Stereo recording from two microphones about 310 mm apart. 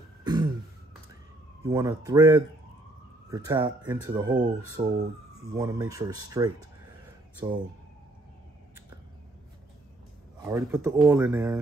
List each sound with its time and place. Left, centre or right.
0.2 s throat clearing: centre
1.7 s speech: centre
10.4 s speech: centre